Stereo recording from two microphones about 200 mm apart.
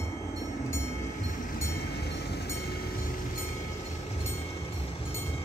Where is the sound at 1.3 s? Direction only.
40° left (ahead or behind).